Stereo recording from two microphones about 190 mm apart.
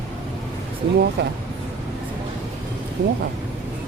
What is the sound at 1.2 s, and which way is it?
Speech, 60° right (ahead or behind).